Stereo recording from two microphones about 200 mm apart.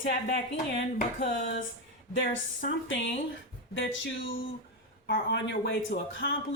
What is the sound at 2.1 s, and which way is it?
Speech, 60° left (ahead or behind).